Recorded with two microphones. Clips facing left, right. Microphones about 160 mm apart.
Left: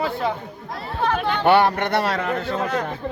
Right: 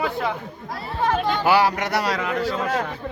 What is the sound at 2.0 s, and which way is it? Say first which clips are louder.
Speech: left 1 dB; 55° left (ahead or behind).